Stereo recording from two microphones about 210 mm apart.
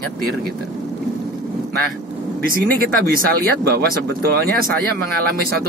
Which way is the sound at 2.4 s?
45° right (ahead or behind).